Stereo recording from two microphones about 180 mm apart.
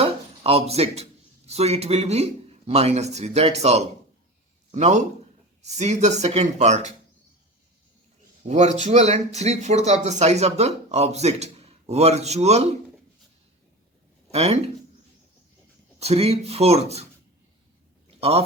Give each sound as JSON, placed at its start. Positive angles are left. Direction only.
{"t": 0.0, "sound": "a sound", "side_deg": -35}
{"t": 1.5, "sound": "speech", "side_deg": -35}
{"t": 8.4, "sound": "speech", "side_deg": -40}
{"t": 14.3, "sound": "speech", "side_deg": -35}
{"t": 16.0, "sound": "speech", "side_deg": -35}
{"t": 18.2, "sound": "speech", "side_deg": -35}